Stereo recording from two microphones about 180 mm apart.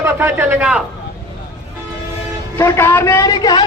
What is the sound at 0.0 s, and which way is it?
Speech, 10° right (ahead or behind).